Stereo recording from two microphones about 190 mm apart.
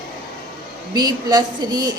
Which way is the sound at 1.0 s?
20° right (ahead or behind).